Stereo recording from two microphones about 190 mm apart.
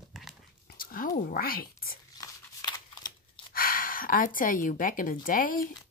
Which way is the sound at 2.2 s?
20° left (ahead or behind).